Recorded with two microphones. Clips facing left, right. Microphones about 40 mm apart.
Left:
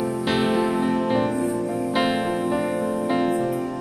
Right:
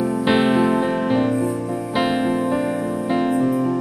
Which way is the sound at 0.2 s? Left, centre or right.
Centre.